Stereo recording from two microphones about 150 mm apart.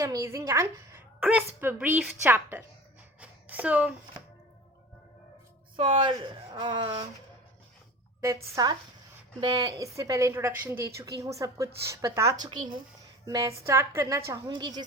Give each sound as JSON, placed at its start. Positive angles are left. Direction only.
{"t": 0.0, "sound": "a woman's voice", "side_deg": -20}
{"t": 3.2, "sound": "a sound", "side_deg": -10}
{"t": 5.7, "sound": "a woman's voice", "side_deg": -35}
{"t": 8.2, "sound": "a woman's voice", "side_deg": -20}